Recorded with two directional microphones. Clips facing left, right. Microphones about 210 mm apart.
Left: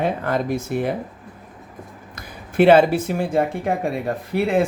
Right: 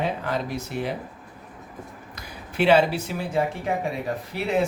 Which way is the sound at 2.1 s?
50° left (ahead or behind).